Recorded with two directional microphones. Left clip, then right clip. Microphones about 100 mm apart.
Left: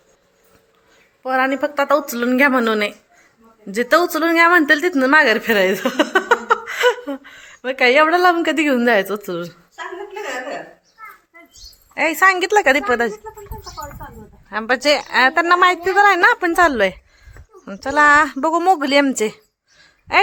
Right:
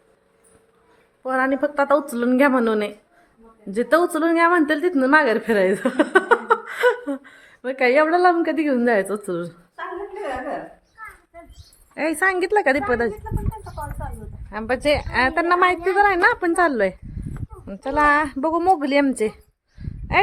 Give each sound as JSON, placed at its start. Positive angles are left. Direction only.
{"t": 1.2, "sound": "a woman's voice", "side_deg": -25}
{"t": 9.0, "sound": "a woman's voice", "side_deg": -15}
{"t": 11.9, "sound": "a woman's voice", "side_deg": 0}
{"t": 14.5, "sound": "a woman's voice", "side_deg": 5}